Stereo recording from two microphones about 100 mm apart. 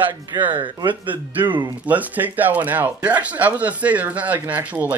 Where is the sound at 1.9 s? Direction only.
15° right (ahead or behind).